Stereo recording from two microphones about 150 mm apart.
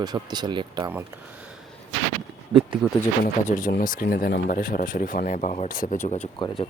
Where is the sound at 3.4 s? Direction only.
60° left (ahead or behind).